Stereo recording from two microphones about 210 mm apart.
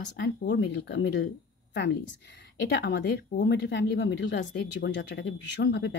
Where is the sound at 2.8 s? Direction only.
55° left (ahead or behind).